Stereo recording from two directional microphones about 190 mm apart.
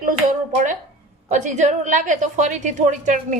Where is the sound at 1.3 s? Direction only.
40° right (ahead or behind).